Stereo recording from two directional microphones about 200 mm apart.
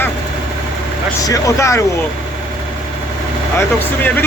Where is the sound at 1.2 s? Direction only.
15° left (ahead or behind).